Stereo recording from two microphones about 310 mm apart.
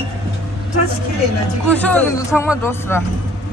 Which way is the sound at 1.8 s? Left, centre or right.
Centre.